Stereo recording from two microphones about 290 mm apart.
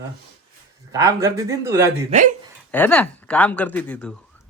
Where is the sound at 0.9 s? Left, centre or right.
Centre.